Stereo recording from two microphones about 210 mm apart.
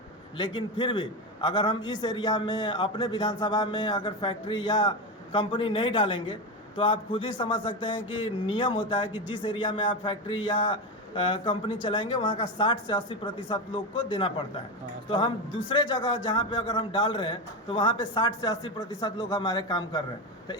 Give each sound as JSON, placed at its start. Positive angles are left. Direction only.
{"t": 0.3, "sound": "a man's voice", "side_deg": 20}
{"t": 15.7, "sound": "a man's voice", "side_deg": 20}